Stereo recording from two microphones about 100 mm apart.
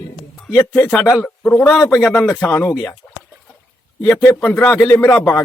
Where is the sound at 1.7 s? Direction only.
5° right (ahead or behind).